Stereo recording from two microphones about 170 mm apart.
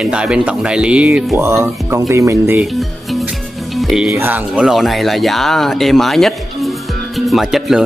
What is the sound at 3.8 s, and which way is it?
Music, centre (ahead or behind).